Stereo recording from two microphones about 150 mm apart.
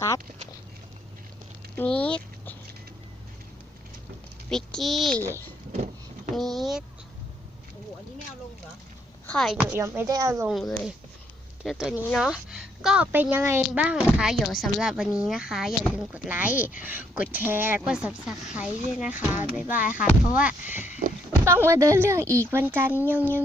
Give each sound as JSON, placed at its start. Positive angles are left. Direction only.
{"t": 1.7, "sound": "a sound", "side_deg": 10}
{"t": 4.4, "sound": "a child's voice", "side_deg": 5}
{"t": 6.3, "sound": "speech", "side_deg": 0}
{"t": 9.2, "sound": "speech", "side_deg": 5}
{"t": 9.7, "sound": "a woman's voice", "side_deg": -15}
{"t": 10.5, "sound": "a woman's voice", "side_deg": 0}